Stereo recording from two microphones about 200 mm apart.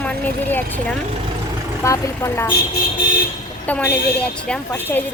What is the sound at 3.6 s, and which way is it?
A woman's voice, 10° left (ahead or behind).